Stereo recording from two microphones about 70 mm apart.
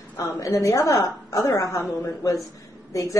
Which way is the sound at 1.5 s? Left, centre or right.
Left.